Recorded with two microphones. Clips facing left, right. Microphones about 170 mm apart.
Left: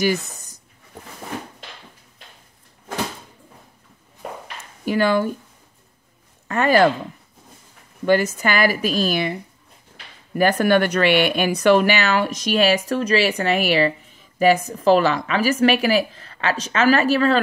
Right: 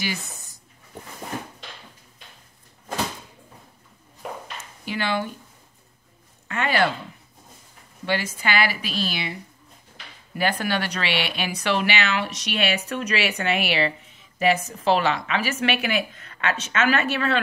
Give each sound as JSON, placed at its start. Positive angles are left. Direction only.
{"t": 0.0, "sound": "speech", "side_deg": 45}
{"t": 4.8, "sound": "speech", "side_deg": 45}
{"t": 6.4, "sound": "speech", "side_deg": 40}
{"t": 8.0, "sound": "speech", "side_deg": 45}
{"t": 10.6, "sound": "speech", "side_deg": 50}